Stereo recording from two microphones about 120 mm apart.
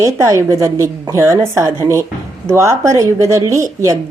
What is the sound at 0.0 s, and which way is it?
A woman's voice, 25° right (ahead or behind).